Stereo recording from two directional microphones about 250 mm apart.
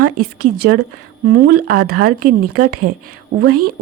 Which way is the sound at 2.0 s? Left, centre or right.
Right.